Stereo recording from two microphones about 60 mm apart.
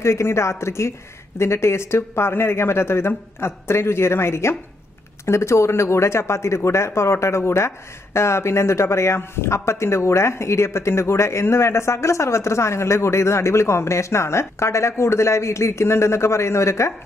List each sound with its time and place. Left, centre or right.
0.0 s speech: left